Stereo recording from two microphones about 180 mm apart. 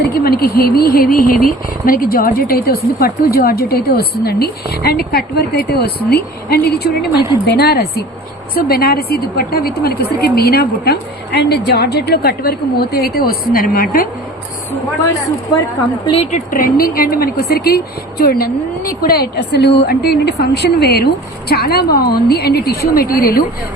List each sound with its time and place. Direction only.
0.1 s a woman's voice: 60° left (ahead or behind)
16.3 s a woman's voice: 50° left (ahead or behind)